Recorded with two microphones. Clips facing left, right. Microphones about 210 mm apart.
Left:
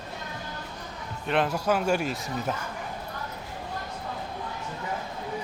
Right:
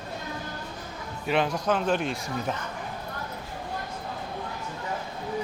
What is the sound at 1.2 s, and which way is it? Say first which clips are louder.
Speech: even; centre (ahead or behind).